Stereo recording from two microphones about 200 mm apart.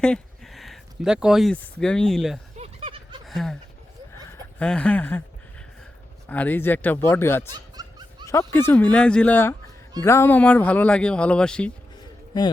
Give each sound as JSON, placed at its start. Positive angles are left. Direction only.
{"t": 0.0, "sound": "speech", "side_deg": 5}
{"t": 2.6, "sound": "a sound", "side_deg": -30}
{"t": 3.2, "sound": "a sound", "side_deg": 0}
{"t": 4.3, "sound": "speech", "side_deg": 5}
{"t": 6.2, "sound": "speech", "side_deg": 10}
{"t": 7.5, "sound": "snicker", "side_deg": -20}
{"t": 8.3, "sound": "speech", "side_deg": 15}